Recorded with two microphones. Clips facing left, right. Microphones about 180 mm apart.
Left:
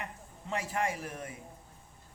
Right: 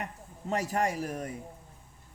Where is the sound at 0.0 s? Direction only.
40° right (ahead or behind).